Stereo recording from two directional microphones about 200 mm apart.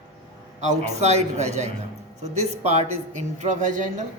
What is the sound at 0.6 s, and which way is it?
Speech, 35° right (ahead or behind).